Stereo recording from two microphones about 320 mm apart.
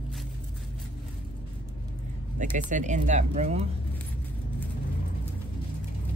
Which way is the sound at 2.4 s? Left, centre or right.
Right.